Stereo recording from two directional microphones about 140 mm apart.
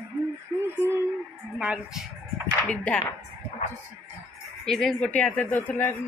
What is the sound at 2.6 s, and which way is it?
Speech, 10° left (ahead or behind).